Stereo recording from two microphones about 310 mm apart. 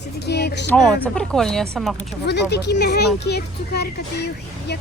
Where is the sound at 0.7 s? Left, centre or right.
Centre.